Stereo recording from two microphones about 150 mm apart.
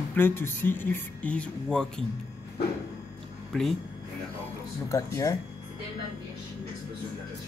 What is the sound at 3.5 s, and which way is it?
Speech, centre (ahead or behind).